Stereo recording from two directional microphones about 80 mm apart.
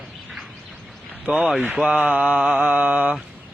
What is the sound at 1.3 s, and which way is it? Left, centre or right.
Speech, centre.